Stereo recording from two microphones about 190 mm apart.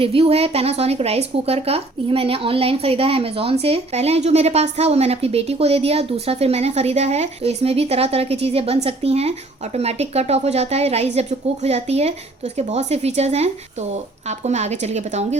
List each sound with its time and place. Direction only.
0.0 s a woman's voice: 30° right (ahead or behind)